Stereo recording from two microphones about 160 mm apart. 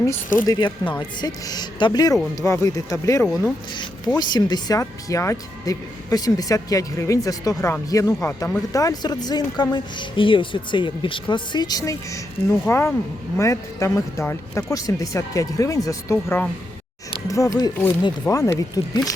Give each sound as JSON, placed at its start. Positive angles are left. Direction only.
{"t": 0.4, "sound": "speech", "side_deg": 25}
{"t": 8.7, "sound": "speech", "side_deg": 20}